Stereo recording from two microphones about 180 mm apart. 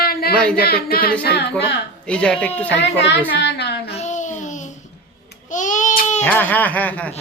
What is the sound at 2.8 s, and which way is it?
Speech, 75° left (ahead or behind).